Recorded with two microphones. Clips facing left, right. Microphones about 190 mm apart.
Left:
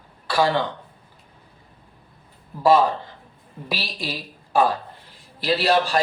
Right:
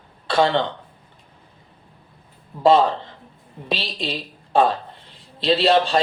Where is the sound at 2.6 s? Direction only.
25° right (ahead or behind).